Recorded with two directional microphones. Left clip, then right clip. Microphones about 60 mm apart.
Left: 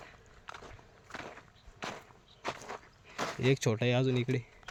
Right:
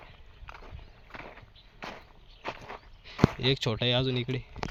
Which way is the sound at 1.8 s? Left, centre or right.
Left.